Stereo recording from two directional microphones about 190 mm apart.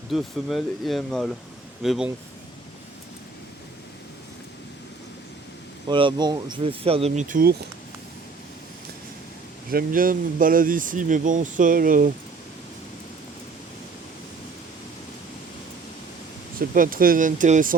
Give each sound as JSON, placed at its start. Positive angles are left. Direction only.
{"t": 0.1, "sound": "speech", "side_deg": 0}
{"t": 5.9, "sound": "speech", "side_deg": -25}
{"t": 9.6, "sound": "speech", "side_deg": -50}
{"t": 16.6, "sound": "speech", "side_deg": -45}